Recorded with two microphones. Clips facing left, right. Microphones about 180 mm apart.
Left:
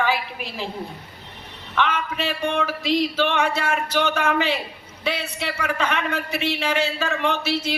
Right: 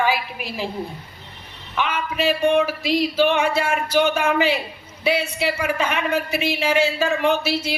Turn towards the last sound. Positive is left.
turn(degrees=-10)  # may be behind; listen again after turning